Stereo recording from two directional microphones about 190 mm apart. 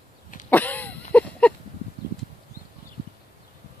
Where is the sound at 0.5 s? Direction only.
10° left (ahead or behind).